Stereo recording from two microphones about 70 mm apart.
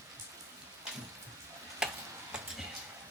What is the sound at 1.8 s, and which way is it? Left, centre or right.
Tick-tock, centre.